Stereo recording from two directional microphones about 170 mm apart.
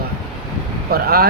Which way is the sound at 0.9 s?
65° right (ahead or behind).